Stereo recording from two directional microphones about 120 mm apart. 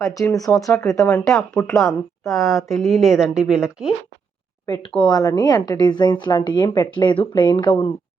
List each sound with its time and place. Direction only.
0.0 s speech: 25° left (ahead or behind)
1.7 s speech: centre (ahead or behind)
4.6 s speech: 30° left (ahead or behind)